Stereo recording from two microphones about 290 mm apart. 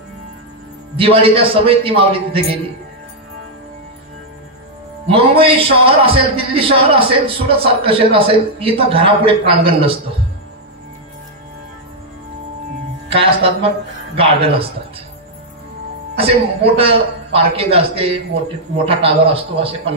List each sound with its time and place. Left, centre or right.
0.9 s a man's voice: centre
5.0 s a man's voice: centre
13.1 s a man's voice: centre
16.2 s a man's voice: centre